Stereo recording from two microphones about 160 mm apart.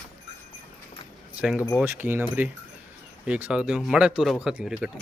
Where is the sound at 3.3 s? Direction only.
10° right (ahead or behind).